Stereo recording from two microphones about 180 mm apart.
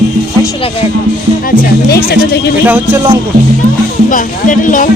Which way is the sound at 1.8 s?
60° left (ahead or behind).